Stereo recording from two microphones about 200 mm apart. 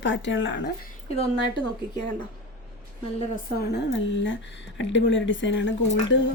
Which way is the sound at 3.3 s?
55° left (ahead or behind).